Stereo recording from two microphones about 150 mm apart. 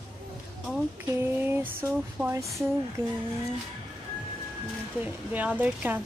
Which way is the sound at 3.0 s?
15° right (ahead or behind).